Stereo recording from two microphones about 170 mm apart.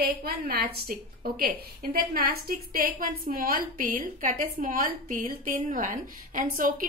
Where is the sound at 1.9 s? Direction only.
60° right (ahead or behind).